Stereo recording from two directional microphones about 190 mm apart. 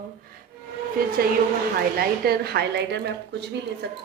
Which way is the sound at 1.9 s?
55° right (ahead or behind).